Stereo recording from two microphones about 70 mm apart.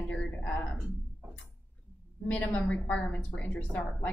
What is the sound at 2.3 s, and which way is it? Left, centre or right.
Speech, centre.